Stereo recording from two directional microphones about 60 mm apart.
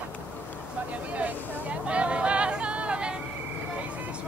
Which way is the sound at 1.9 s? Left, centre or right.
Centre.